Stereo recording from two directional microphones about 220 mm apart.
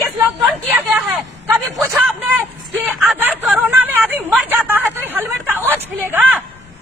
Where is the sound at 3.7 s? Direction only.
10° right (ahead or behind).